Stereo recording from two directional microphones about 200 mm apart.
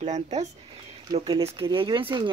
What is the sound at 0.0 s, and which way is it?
Speech, 35° right (ahead or behind).